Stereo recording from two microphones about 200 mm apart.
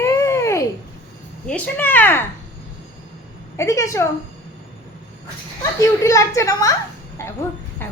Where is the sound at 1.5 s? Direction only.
5° left (ahead or behind).